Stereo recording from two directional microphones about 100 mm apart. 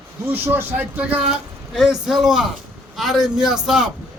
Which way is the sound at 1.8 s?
5° right (ahead or behind).